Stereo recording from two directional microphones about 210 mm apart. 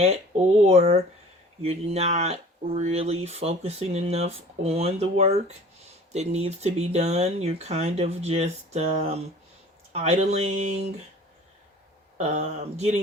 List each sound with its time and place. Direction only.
0.6 s speech: 30° right (ahead or behind)
12.1 s speech: 35° right (ahead or behind)